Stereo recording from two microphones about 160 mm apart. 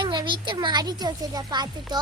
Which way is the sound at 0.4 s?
30° right (ahead or behind).